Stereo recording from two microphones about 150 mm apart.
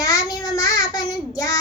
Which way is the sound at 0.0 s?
25° left (ahead or behind).